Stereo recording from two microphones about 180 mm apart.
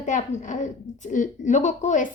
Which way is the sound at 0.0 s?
40° left (ahead or behind).